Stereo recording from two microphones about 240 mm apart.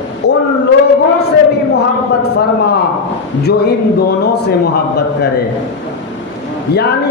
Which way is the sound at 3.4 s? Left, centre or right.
Left.